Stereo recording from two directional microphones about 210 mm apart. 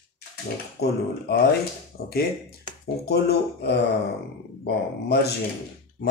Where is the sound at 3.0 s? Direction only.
50° left (ahead or behind).